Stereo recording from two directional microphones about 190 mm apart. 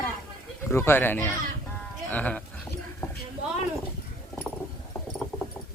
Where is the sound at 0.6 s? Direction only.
10° left (ahead or behind).